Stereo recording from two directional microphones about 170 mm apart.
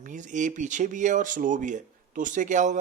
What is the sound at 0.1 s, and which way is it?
Speech, 45° right (ahead or behind).